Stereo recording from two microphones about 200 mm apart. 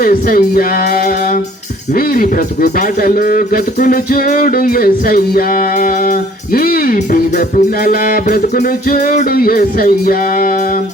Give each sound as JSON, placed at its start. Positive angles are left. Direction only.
{"t": 0.0, "sound": "speech", "side_deg": 45}